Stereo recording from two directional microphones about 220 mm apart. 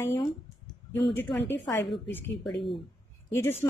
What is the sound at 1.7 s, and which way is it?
Speech, 10° left (ahead or behind).